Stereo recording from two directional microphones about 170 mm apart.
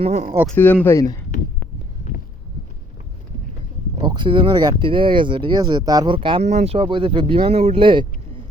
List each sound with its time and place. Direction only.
0.0 s speech: 40° right (ahead or behind)
0.4 s speech: 10° left (ahead or behind)
3.9 s speech: 25° right (ahead or behind)